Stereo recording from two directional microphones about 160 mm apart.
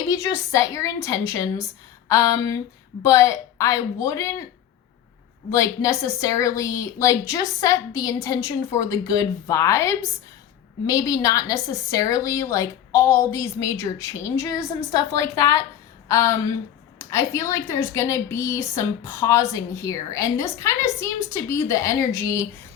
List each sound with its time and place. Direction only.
0.1 s a woman's voice: 20° left (ahead or behind)
5.5 s a woman's voice: 20° left (ahead or behind)